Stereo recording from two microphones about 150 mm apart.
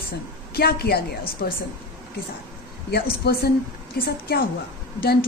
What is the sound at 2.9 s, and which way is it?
A woman's voice, 90° left.